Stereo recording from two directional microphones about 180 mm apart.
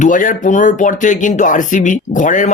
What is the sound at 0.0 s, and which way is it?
Speech, 45° left (ahead or behind).